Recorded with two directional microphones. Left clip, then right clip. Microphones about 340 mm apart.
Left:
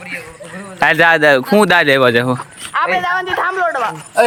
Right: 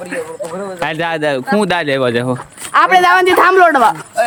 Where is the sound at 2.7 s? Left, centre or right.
Right.